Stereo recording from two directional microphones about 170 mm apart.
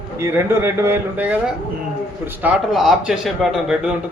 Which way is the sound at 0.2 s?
15° right (ahead or behind).